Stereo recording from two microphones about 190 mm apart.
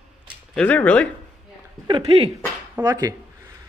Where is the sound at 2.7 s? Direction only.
15° right (ahead or behind).